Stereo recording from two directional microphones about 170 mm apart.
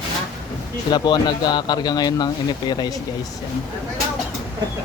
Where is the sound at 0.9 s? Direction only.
25° left (ahead or behind).